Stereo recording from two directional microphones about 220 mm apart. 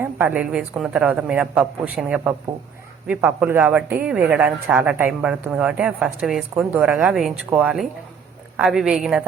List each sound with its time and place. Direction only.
0.0 s a woman's voice: 10° right (ahead or behind)